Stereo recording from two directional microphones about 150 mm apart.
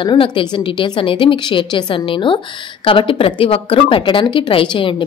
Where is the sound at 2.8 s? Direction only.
35° left (ahead or behind).